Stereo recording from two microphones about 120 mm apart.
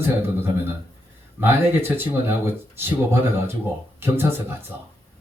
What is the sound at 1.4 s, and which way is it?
Speech, 20° right (ahead or behind).